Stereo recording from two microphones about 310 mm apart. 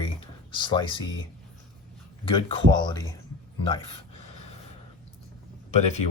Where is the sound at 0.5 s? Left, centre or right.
Centre.